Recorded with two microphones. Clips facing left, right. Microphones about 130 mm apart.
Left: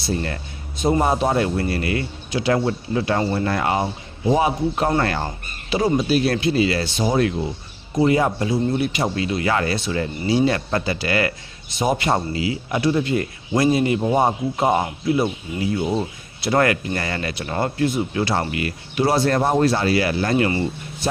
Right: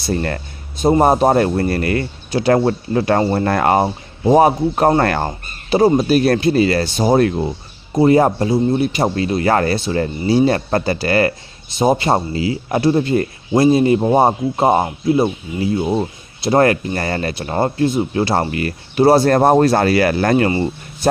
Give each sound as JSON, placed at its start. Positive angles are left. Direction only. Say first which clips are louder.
{"t": 0.1, "sound": "speech", "louder": "right 5 dB", "side_deg": -55}
{"t": 0.8, "sound": "speech", "louder": "right 6 dB", "side_deg": -35}
{"t": 6.1, "sound": "speech", "louder": "right 5 dB", "side_deg": -45}